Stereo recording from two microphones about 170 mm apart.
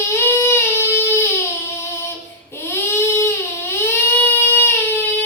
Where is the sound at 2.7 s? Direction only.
15° left (ahead or behind).